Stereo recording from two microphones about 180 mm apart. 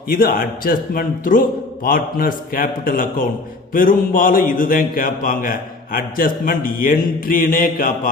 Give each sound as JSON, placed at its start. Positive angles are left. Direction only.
{"t": 0.1, "sound": "speech", "side_deg": 55}